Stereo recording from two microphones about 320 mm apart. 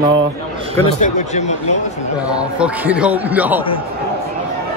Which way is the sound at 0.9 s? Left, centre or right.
Left.